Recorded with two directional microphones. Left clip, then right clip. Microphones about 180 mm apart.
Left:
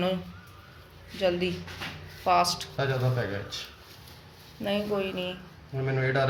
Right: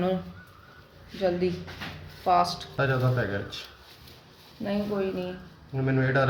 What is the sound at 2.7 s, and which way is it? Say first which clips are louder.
Speech: right 6 dB; 15° left (ahead or behind).